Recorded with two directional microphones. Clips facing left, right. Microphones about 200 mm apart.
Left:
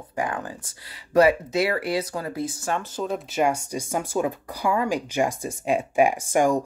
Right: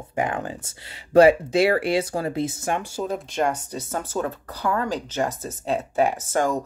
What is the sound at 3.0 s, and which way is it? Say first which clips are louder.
Speech: left 2 dB; 5° left (ahead or behind).